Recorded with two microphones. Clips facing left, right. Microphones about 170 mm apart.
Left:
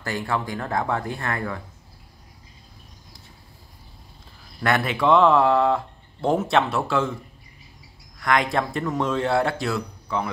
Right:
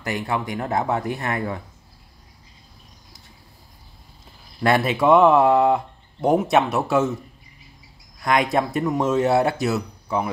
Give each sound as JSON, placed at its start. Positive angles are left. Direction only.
{"t": 0.0, "sound": "speech", "side_deg": -20}
{"t": 4.6, "sound": "speech", "side_deg": -20}
{"t": 8.2, "sound": "speech", "side_deg": -20}